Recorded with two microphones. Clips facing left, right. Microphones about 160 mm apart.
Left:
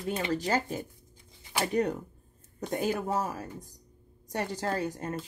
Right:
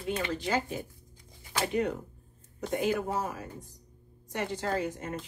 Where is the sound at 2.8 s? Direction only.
40° left (ahead or behind).